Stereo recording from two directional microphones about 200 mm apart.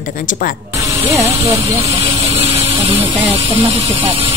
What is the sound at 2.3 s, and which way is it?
Speech, 30° right (ahead or behind).